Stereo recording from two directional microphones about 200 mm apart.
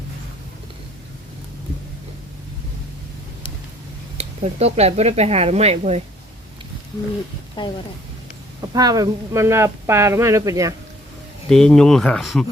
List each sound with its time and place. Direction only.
4.2 s speech: 30° right (ahead or behind)
7.6 s speech: 25° left (ahead or behind)
8.7 s speech: 20° right (ahead or behind)
11.4 s speech: 5° left (ahead or behind)